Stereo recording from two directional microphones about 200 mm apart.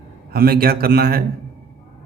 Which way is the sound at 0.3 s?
50° right (ahead or behind).